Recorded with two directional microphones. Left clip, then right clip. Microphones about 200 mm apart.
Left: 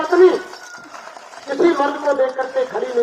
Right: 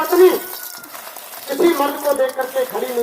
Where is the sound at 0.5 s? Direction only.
20° right (ahead or behind).